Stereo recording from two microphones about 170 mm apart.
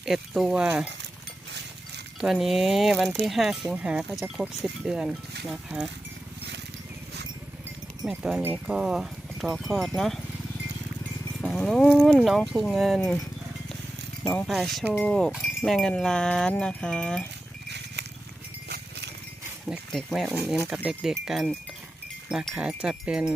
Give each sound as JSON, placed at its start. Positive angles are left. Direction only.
{"t": 0.0, "sound": "speech", "side_deg": 0}
{"t": 2.2, "sound": "speech", "side_deg": 0}
{"t": 8.0, "sound": "speech", "side_deg": -5}
{"t": 11.3, "sound": "speech", "side_deg": 5}
{"t": 14.3, "sound": "speech", "side_deg": 0}
{"t": 17.7, "sound": "a sound", "side_deg": -85}
{"t": 19.6, "sound": "speech", "side_deg": 0}